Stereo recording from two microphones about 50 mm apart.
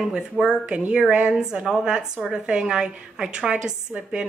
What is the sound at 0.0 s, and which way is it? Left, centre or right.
Speech, centre.